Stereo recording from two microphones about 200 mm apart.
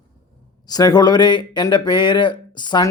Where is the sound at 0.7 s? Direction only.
20° left (ahead or behind).